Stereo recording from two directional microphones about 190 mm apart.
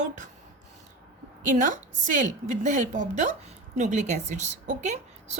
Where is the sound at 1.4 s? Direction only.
40° right (ahead or behind).